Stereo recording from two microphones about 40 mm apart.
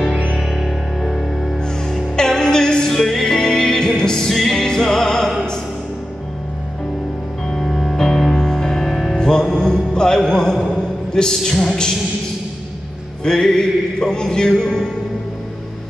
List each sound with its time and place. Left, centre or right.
0.4 s music: centre
2.1 s music: centre
7.4 s music: centre
9.1 s music: centre
13.2 s music: centre